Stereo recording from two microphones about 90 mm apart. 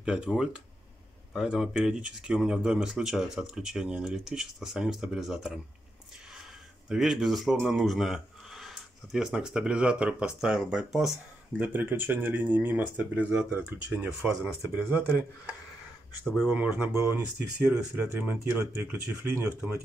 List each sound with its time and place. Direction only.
0.0 s speech: 10° right (ahead or behind)
6.9 s speech: 5° right (ahead or behind)
11.6 s speech: 20° right (ahead or behind)
16.5 s speech: 15° right (ahead or behind)
16.9 s speech: 30° right (ahead or behind)
17.9 s speech: 20° right (ahead or behind)